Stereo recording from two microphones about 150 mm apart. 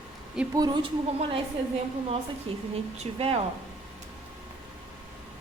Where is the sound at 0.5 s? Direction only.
30° right (ahead or behind).